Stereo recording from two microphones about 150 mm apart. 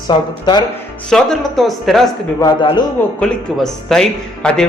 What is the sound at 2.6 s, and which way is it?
Speech, 35° left (ahead or behind).